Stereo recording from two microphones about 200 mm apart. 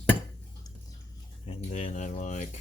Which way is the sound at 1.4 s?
35° left (ahead or behind).